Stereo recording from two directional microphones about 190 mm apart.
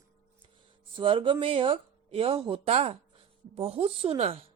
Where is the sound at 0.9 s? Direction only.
25° right (ahead or behind).